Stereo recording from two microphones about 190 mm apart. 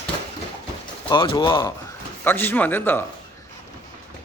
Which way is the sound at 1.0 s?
25° left (ahead or behind).